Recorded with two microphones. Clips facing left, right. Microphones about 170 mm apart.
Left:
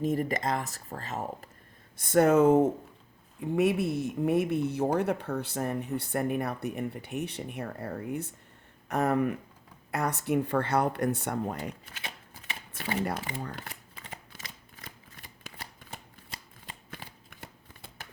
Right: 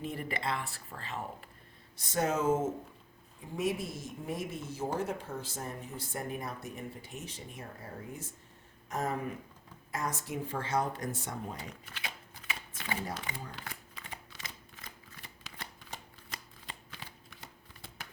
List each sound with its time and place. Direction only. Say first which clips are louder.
0.0 s speech: left 8 dB; 40° left (ahead or behind)
2.0 s speech: left 10 dB; 55° left (ahead or behind)
13.0 s speech: left 10 dB; 65° left (ahead or behind)
13.4 s speech: left 7 dB; 50° left (ahead or behind)
15.5 s shuffling cards: left 5 dB; 55° left (ahead or behind)
16.9 s shuffling cards: left 4 dB; 55° left (ahead or behind)